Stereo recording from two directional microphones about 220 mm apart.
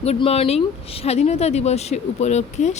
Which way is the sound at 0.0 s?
25° left (ahead or behind).